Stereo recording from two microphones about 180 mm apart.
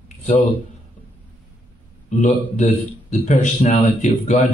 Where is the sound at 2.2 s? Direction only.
40° left (ahead or behind).